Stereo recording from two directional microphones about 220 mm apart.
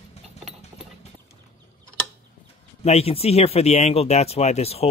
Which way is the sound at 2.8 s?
30° left (ahead or behind).